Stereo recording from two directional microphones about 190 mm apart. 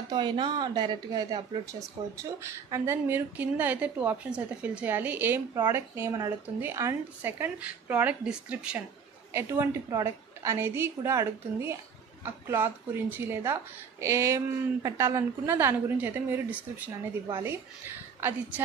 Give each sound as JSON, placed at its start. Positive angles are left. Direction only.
{"t": 0.1, "sound": "a woman's voice", "side_deg": -25}
{"t": 17.4, "sound": "a woman's voice", "side_deg": -10}